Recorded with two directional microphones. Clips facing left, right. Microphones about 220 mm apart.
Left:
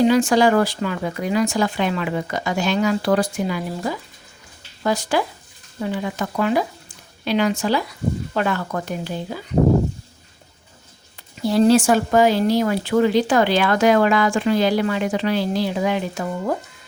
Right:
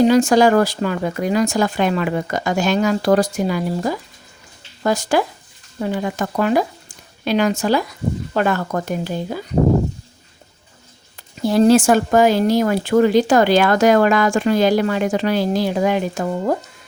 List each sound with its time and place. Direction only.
0.0 s speech: 40° right (ahead or behind)
11.4 s speech: 50° right (ahead or behind)